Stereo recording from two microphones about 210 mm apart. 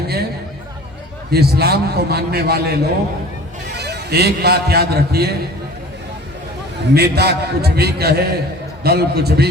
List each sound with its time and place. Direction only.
1.3 s a man's voice: 50° right (ahead or behind)
6.9 s a man's voice: 50° right (ahead or behind)